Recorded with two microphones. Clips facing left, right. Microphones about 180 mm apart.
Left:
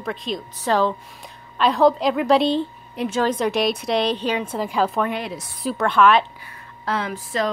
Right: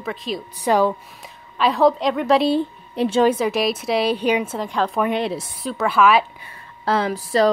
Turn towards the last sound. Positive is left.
turn(degrees=-35)  # may be behind; listen again after turning